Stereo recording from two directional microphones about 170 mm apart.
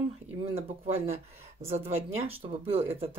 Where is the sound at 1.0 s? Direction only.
35° right (ahead or behind).